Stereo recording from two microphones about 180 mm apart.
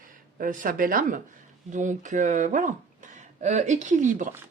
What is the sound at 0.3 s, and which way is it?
Speech, 50° right (ahead or behind).